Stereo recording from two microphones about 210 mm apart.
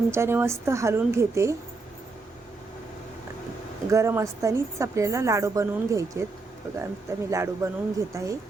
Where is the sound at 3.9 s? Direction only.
15° right (ahead or behind).